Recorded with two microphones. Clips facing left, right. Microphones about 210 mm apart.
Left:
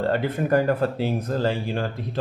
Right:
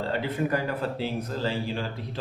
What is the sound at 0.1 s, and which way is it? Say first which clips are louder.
Speech: left 5 dB; 50° left (ahead or behind).